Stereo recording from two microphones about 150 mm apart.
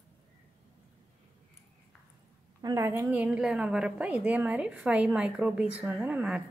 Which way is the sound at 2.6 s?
20° right (ahead or behind).